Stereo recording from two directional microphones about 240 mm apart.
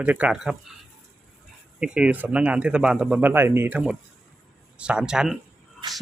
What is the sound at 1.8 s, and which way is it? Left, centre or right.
Speech, centre.